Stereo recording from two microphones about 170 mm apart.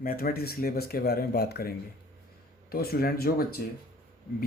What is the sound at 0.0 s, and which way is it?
Speech, 60° left (ahead or behind).